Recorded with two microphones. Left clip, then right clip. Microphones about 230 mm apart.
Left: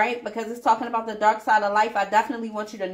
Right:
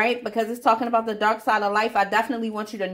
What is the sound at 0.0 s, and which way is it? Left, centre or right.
A woman's voice, right.